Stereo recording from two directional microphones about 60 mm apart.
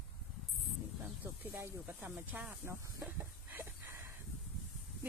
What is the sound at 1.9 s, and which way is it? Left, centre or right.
Speech, right.